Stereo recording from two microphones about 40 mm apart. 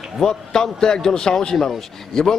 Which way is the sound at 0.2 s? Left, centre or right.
Centre.